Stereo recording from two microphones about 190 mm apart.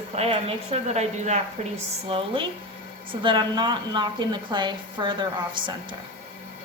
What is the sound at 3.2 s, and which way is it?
A woman's voice, 25° right (ahead or behind).